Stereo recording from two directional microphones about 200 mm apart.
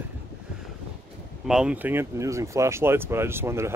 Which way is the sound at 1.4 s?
5° right (ahead or behind).